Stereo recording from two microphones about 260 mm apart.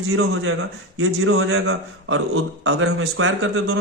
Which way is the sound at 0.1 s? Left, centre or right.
Right.